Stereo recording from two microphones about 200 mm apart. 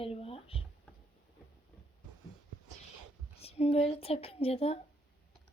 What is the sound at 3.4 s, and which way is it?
Speech, 30° left (ahead or behind).